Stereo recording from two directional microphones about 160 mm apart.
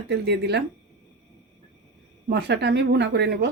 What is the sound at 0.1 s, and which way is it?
Speech, 90° right.